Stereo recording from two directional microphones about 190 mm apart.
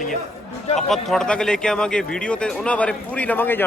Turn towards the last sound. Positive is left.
turn(degrees=10)  # may be behind; listen again after turning